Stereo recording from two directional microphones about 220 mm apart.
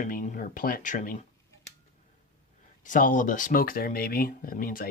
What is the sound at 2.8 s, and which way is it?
Speech, 35° left (ahead or behind).